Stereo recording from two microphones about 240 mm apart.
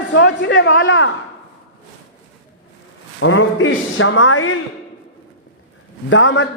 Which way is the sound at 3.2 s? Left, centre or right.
Left.